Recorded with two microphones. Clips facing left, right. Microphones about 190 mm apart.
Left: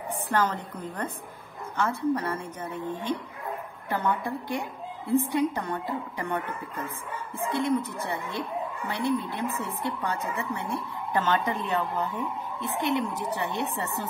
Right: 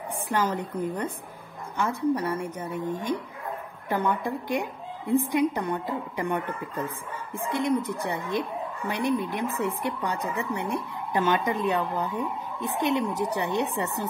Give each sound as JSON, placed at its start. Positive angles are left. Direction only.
{"t": 0.1, "sound": "a woman's voice", "side_deg": -10}